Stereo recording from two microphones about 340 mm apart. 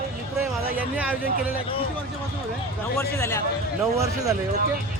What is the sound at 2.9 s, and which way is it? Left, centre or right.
Speech, centre.